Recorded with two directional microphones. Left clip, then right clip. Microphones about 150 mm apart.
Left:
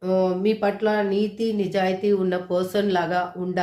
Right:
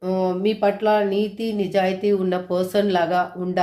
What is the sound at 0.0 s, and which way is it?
A woman's voice, 10° right (ahead or behind).